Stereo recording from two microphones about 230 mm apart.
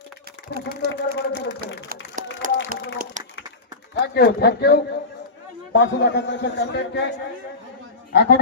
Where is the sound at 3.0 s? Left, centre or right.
Right.